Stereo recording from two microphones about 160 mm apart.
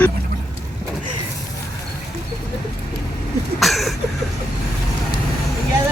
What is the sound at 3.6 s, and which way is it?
Speech, centre (ahead or behind).